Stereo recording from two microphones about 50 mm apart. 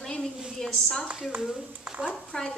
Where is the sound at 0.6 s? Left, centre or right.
Centre.